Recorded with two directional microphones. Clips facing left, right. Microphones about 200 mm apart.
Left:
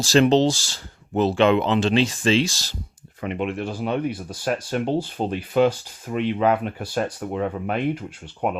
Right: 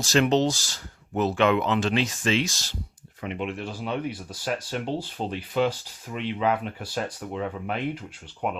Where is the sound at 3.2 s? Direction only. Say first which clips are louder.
Left 5 dB; 60° left (ahead or behind).